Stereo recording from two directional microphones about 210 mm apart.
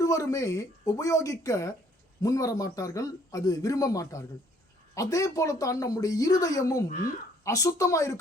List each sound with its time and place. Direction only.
0.0 s a man's voice: 15° left (ahead or behind)